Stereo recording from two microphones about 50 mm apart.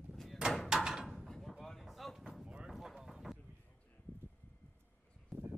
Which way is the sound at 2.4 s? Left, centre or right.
Centre.